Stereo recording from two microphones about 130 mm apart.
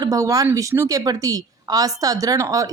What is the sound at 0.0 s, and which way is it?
Speech, 25° right (ahead or behind).